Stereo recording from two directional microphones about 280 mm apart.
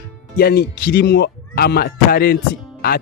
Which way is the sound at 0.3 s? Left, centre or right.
Left.